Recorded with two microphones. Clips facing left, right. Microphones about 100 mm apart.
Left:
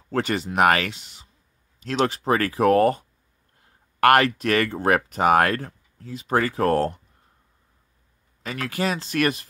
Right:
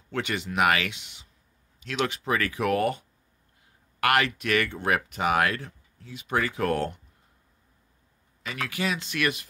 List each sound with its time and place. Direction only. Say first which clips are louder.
0.1 s speech: left 5 dB; 40° left (ahead or behind)
8.4 s speech: left 4 dB; 40° left (ahead or behind)